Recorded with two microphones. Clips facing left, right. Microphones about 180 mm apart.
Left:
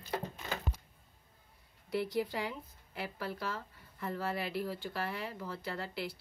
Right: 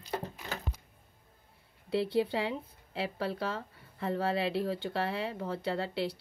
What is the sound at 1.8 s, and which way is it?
Speech, 25° right (ahead or behind).